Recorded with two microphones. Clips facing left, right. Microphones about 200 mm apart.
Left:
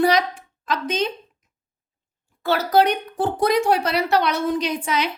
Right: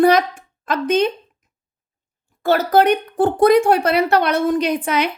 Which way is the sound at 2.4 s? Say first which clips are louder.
Right 3 dB; 50° right (ahead or behind).